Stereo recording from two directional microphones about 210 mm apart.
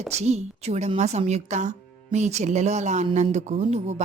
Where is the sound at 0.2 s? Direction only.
30° right (ahead or behind).